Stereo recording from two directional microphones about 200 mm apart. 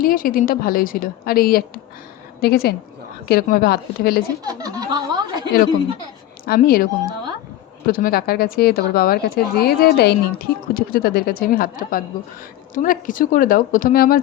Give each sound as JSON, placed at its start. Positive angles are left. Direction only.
{"t": 0.0, "sound": "a woman's voice", "side_deg": 45}
{"t": 4.4, "sound": "snicker", "side_deg": -20}
{"t": 6.4, "sound": "speech", "side_deg": 45}
{"t": 7.9, "sound": "a woman's voice", "side_deg": 45}